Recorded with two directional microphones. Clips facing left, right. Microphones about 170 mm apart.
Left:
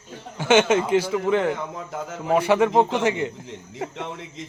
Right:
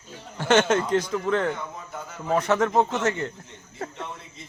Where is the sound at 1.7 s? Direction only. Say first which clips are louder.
Left 6 dB; 90° left.